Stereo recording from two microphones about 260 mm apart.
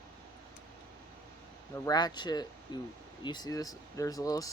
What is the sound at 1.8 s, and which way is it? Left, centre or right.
Speech, centre.